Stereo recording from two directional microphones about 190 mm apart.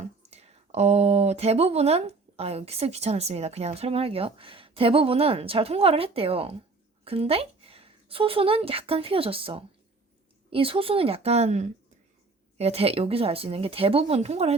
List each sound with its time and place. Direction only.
0.0 s speech: 35° right (ahead or behind)